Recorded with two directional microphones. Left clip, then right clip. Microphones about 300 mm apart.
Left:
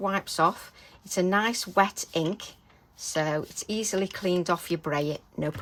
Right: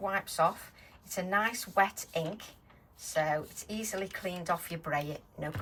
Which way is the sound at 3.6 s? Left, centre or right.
Centre.